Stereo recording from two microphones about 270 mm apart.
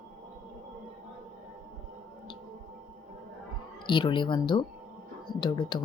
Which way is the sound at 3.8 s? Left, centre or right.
Centre.